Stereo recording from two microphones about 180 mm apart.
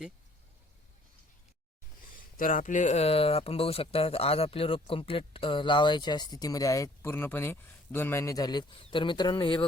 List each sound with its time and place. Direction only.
2.1 s speech: 50° left (ahead or behind); by 9.6 s 25° left (ahead or behind)